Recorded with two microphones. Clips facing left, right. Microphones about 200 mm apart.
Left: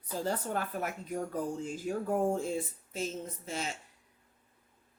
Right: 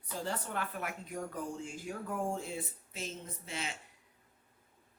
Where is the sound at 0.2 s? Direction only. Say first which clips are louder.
Left 5 dB; 40° left (ahead or behind).